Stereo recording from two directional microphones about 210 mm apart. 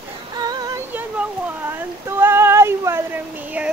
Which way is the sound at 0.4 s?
20° right (ahead or behind).